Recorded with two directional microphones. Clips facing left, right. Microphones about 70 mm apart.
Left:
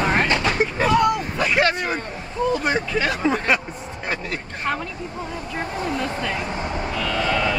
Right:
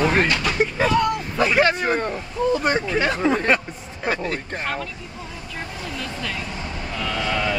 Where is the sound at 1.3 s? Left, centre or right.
Centre.